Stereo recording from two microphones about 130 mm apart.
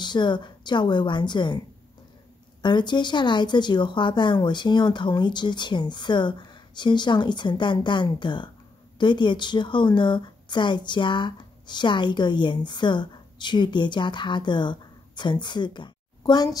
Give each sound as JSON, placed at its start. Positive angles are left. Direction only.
{"t": 0.0, "sound": "a woman's voice", "side_deg": 35}
{"t": 2.6, "sound": "a woman's voice", "side_deg": 35}